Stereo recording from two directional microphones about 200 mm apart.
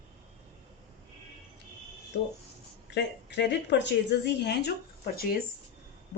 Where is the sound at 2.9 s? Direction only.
60° left (ahead or behind).